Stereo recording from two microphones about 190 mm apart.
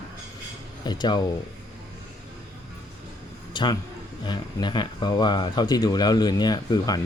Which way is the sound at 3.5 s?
25° left (ahead or behind).